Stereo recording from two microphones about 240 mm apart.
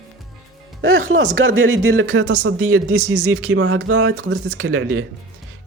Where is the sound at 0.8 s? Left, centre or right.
Right.